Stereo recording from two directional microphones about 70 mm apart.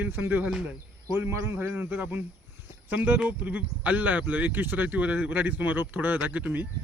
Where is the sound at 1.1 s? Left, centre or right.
Right.